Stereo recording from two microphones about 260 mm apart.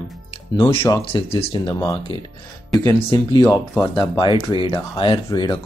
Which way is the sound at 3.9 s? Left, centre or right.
Centre.